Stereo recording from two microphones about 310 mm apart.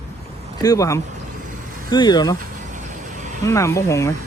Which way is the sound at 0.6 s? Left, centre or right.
Centre.